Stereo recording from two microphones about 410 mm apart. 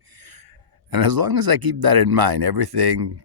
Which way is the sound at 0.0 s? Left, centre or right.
Right.